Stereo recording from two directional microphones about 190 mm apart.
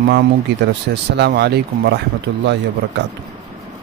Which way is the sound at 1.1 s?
60° right (ahead or behind).